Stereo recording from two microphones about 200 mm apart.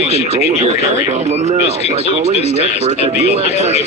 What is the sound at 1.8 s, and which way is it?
Speech, 30° left (ahead or behind).